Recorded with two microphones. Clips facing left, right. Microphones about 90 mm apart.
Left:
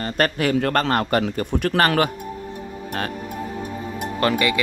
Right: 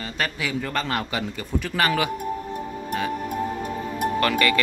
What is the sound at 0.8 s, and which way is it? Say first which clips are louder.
Speech: left 7 dB; 45° left (ahead or behind).